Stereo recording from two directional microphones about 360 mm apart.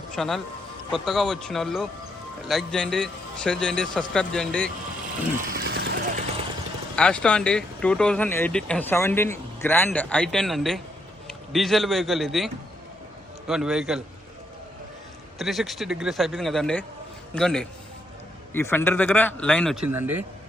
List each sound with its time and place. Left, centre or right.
0.2 s speech: centre
5.5 s vehicle: right
6.9 s a man's voice: centre
13.5 s speech: centre
15.4 s speech: centre